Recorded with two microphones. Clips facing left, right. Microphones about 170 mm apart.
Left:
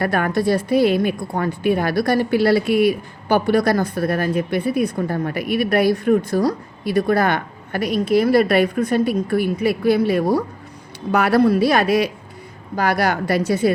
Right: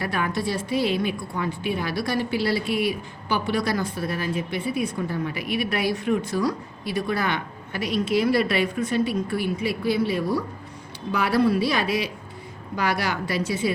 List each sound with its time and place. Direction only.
0.0 s a woman's voice: 55° left (ahead or behind)
6.9 s a woman's voice: 55° left (ahead or behind)
11.1 s a woman's voice: 70° left (ahead or behind); by 11.7 s 50° left (ahead or behind)
11.7 s a woman's voice: 65° left (ahead or behind)
12.7 s a woman's voice: 50° left (ahead or behind)